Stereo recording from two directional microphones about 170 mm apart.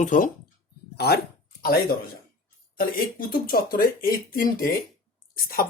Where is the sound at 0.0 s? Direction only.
50° left (ahead or behind).